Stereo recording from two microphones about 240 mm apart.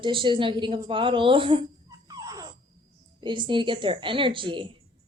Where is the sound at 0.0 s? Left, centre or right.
Right.